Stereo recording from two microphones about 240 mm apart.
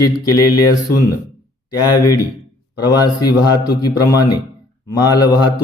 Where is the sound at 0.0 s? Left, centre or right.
Centre.